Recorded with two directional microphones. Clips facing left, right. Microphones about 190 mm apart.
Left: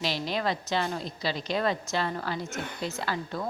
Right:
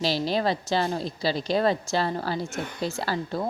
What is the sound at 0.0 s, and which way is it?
Speech, 35° right (ahead or behind).